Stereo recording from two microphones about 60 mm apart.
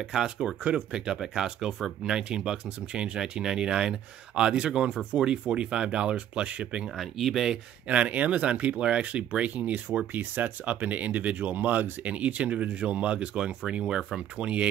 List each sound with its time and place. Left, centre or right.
0.1 s speech: centre
7.0 s speech: centre
7.9 s speech: right